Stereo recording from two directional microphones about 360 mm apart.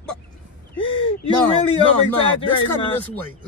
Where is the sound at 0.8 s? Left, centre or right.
Centre.